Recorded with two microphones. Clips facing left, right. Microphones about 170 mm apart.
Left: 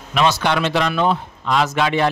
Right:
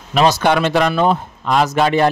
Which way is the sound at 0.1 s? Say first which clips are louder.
Right 4 dB; 40° right (ahead or behind).